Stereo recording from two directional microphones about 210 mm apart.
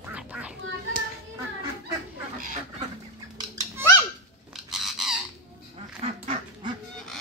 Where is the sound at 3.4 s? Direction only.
15° right (ahead or behind).